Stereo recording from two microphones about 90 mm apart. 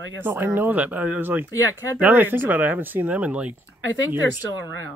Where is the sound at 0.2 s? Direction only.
25° right (ahead or behind).